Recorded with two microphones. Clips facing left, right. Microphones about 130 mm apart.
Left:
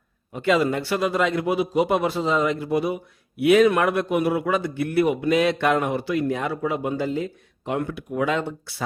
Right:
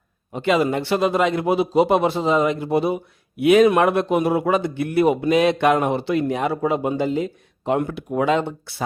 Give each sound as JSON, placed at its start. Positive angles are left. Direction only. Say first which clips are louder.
{"t": 0.3, "sound": "a man's voice", "louder": "right 2 dB", "side_deg": -20}